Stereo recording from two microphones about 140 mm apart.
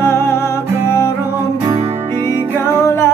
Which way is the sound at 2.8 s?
20° left (ahead or behind).